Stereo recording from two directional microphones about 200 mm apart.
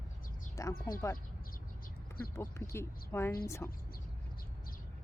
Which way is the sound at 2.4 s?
15° left (ahead or behind).